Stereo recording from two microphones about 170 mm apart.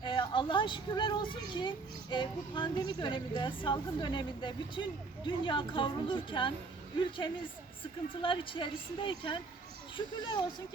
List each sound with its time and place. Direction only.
0.0 s a child's voice: 25° left (ahead or behind)
8.1 s a child's voice: 30° left (ahead or behind)